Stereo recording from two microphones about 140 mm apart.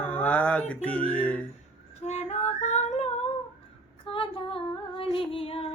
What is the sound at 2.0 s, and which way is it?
Female singing, 50° left (ahead or behind).